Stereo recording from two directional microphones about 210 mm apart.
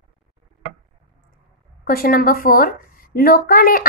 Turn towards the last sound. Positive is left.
turn(degrees=45)  # may be behind; listen again after turning